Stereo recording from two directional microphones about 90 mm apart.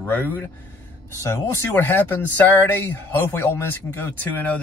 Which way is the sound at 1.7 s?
20° left (ahead or behind).